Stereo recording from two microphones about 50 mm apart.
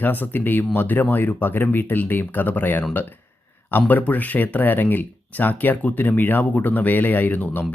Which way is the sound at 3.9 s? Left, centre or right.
Left.